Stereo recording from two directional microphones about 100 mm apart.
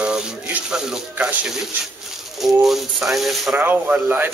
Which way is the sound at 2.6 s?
Centre (ahead or behind).